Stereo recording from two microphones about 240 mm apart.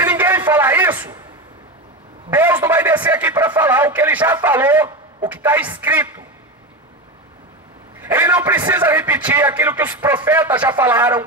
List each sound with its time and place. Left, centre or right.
0.0 s a sound: centre
2.3 s a man's voice: centre
8.0 s a man's voice: centre